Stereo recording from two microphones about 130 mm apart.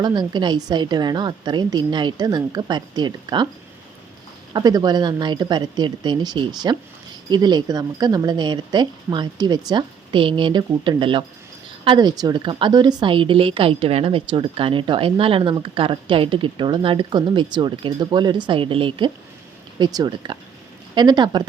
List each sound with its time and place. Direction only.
0.0 s a woman's voice: 35° right (ahead or behind)
4.5 s a woman's voice: 30° right (ahead or behind)